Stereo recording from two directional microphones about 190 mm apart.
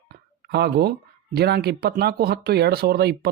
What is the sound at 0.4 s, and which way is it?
Speech, 60° right (ahead or behind).